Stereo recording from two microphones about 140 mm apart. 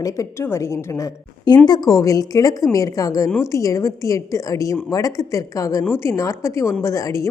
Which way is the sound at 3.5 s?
25° left (ahead or behind).